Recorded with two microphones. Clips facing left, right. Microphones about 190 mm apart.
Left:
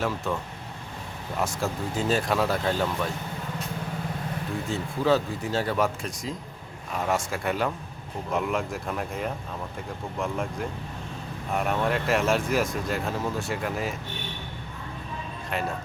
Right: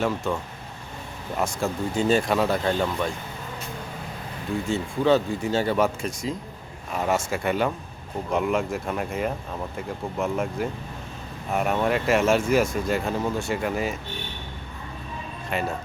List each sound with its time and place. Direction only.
0.3 s speech: centre (ahead or behind)
4.7 s speech: centre (ahead or behind)
15.4 s speech: centre (ahead or behind)